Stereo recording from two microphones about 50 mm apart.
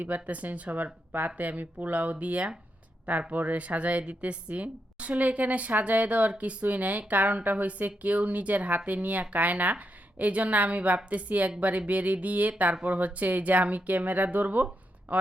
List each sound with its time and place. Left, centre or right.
0.0 s a woman's voice: right